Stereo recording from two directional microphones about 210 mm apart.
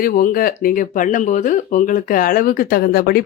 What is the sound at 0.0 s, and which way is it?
Speech, 40° left (ahead or behind).